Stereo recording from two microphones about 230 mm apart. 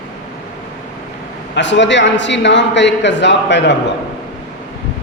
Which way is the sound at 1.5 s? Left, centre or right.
Left.